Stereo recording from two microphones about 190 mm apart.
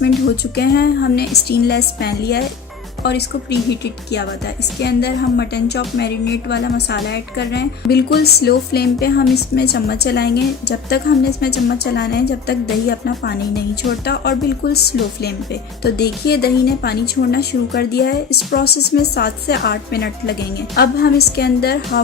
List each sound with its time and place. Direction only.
0.5 s speech: 60° left (ahead or behind)